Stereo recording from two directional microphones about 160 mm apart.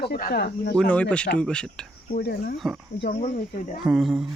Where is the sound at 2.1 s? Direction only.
85° left.